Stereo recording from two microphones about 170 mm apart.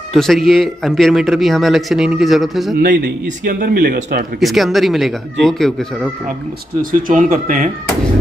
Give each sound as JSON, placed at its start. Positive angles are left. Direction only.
{"t": 0.1, "sound": "speech", "side_deg": 0}
{"t": 2.8, "sound": "speech", "side_deg": -55}
{"t": 4.4, "sound": "speech", "side_deg": 0}
{"t": 6.8, "sound": "speech", "side_deg": -55}